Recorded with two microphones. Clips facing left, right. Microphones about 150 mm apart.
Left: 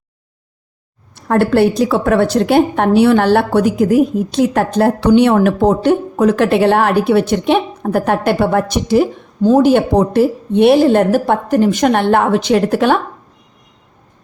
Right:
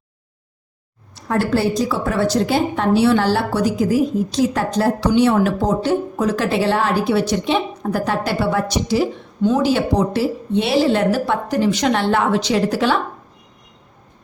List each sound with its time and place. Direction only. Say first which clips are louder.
1.1 s a woman's voice: left 6 dB; 60° left (ahead or behind)
9.4 s a woman's voice: left 6 dB; 45° left (ahead or behind)